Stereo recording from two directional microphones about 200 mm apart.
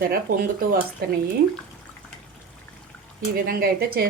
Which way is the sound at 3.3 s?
45° right (ahead or behind).